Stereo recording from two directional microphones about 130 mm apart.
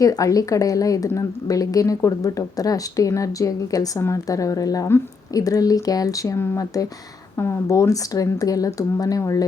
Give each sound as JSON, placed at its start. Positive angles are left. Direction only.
{"t": 0.0, "sound": "a woman's voice", "side_deg": 25}